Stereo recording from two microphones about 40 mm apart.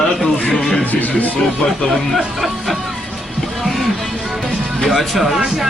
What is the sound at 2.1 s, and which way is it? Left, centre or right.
Speech, centre.